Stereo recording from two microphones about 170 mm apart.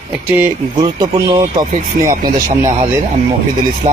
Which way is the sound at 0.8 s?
25° right (ahead or behind).